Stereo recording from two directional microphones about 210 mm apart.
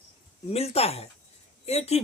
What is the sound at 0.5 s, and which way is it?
Speech, 30° left (ahead or behind).